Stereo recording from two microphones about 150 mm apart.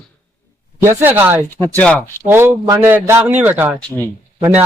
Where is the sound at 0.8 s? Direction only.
15° right (ahead or behind).